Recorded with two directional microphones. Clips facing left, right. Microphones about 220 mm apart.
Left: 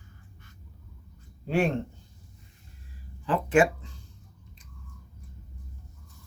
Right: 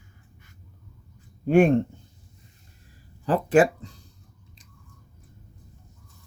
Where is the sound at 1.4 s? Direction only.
50° right (ahead or behind).